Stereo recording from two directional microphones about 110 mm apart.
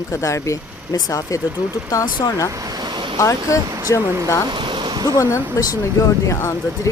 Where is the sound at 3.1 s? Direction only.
30° left (ahead or behind).